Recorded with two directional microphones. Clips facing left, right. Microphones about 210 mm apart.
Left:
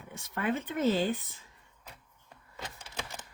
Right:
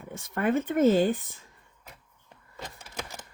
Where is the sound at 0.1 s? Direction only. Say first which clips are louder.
Right 6 dB; 50° right (ahead or behind).